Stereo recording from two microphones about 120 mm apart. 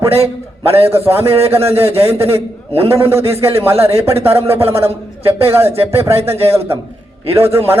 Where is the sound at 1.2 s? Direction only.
55° right (ahead or behind).